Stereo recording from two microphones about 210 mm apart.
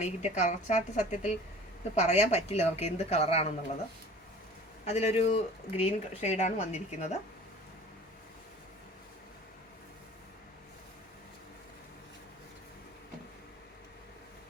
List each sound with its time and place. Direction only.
0.0 s speech: 30° left (ahead or behind)
4.9 s speech: 30° left (ahead or behind)